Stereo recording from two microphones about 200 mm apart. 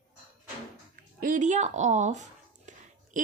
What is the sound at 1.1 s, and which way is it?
Speech, 45° right (ahead or behind).